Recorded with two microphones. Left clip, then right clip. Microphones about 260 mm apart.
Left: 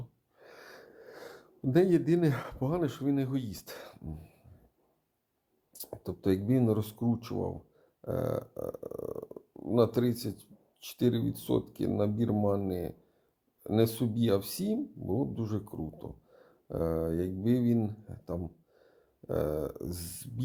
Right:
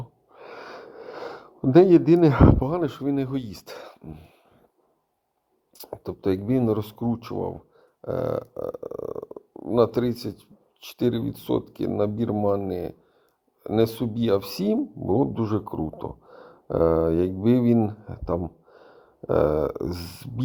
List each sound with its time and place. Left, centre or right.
0.3 s speech: centre
5.7 s speech: centre